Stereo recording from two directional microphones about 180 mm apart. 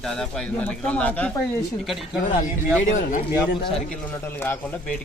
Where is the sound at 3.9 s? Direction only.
10° left (ahead or behind).